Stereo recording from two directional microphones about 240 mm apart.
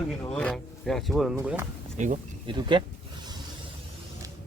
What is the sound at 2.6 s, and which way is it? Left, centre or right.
Speech, centre.